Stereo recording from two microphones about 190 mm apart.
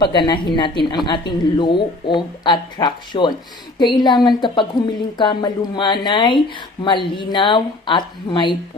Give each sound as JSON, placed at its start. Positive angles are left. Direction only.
{"t": 0.0, "sound": "speech", "side_deg": 25}